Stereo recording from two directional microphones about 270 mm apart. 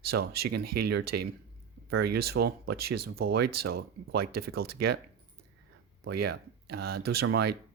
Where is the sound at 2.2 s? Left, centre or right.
Right.